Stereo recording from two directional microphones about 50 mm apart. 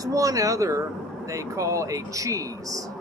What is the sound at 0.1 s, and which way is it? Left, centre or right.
Speech, right.